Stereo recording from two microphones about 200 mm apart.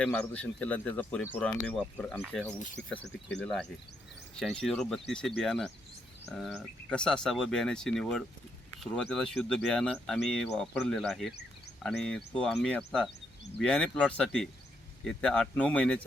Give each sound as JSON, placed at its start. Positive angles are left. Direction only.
{"t": 0.0, "sound": "speech", "side_deg": 5}
{"t": 2.8, "sound": "speech", "side_deg": 60}
{"t": 3.3, "sound": "speech", "side_deg": 5}